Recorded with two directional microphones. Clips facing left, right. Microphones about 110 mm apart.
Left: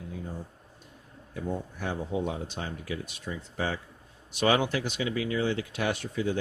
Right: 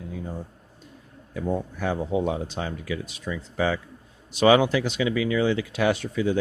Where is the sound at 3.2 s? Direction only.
90° right.